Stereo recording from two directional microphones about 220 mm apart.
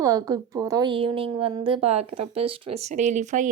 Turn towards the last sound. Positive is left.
turn(degrees=-35)  # may be behind; listen again after turning